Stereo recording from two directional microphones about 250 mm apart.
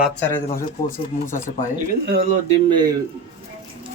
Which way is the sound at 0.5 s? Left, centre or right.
Left.